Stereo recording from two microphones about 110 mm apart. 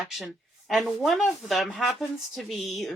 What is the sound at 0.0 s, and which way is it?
Speech, centre (ahead or behind).